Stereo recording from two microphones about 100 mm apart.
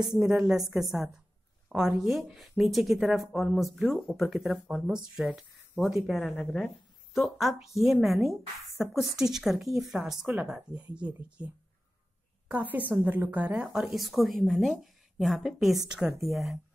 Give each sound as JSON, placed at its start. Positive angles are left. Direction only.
{"t": 0.0, "sound": "a woman's voice", "side_deg": -5}
{"t": 13.7, "sound": "a woman's voice", "side_deg": 0}